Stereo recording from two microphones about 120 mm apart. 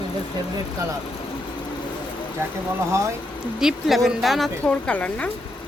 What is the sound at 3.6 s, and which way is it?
Speech, 5° right (ahead or behind).